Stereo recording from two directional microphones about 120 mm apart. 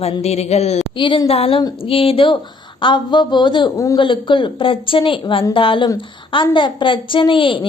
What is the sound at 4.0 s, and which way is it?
A woman's voice, 45° left (ahead or behind).